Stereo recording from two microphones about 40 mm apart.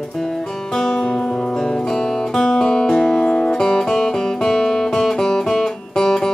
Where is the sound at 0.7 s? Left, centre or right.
Centre.